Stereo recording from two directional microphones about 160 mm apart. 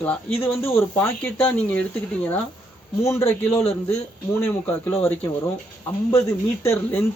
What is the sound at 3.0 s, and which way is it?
Speech, 20° left (ahead or behind).